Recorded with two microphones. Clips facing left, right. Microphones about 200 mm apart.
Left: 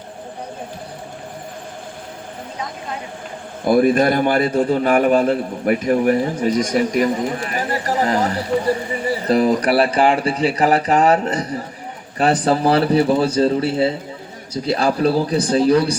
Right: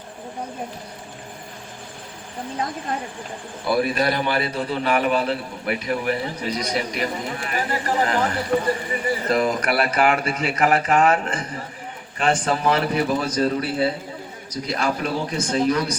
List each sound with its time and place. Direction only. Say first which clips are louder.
3.6 s a man's voice: left 7 dB; 50° left (ahead or behind); by 16.0 s 30° left (ahead or behind)